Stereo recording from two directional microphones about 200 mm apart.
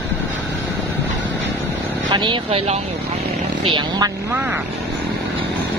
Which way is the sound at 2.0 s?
25° right (ahead or behind).